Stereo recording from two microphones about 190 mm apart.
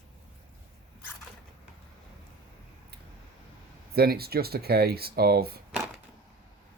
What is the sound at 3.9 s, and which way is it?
Speech, 55° right (ahead or behind).